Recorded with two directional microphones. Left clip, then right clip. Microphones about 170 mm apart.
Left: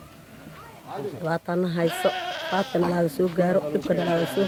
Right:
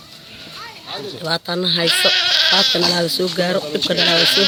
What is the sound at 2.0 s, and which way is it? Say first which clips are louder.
Speech: right 11 dB; 10° right (ahead or behind).